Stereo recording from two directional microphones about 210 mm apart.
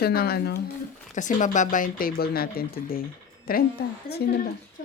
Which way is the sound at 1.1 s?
35° left (ahead or behind).